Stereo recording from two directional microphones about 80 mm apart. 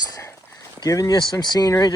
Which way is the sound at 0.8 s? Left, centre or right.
Left.